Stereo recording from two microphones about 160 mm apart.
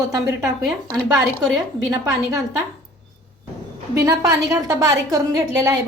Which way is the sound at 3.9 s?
20° right (ahead or behind).